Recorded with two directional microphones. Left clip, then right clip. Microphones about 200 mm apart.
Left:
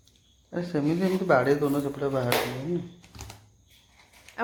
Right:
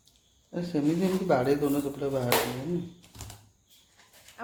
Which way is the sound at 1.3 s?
15° left (ahead or behind).